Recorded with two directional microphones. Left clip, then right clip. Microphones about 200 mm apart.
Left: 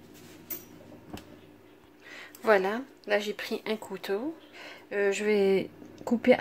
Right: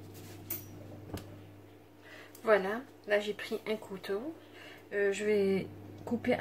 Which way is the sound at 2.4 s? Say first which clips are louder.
Left 4 dB; 50° left (ahead or behind).